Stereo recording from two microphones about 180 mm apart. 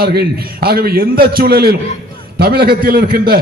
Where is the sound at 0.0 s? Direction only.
60° right (ahead or behind).